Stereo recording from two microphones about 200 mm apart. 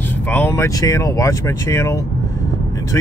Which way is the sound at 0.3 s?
10° left (ahead or behind).